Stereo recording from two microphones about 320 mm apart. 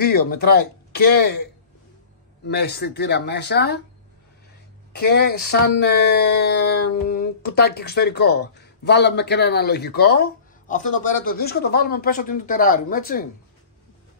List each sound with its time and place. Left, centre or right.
0.0 s speech: left
4.9 s speech: left